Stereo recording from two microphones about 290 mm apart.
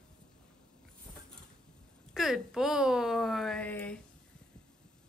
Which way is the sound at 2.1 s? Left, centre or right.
Centre.